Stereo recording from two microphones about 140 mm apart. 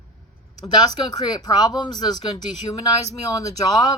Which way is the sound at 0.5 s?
30° left (ahead or behind).